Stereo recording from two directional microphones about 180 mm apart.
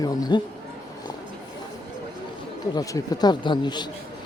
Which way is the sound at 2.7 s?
20° left (ahead or behind).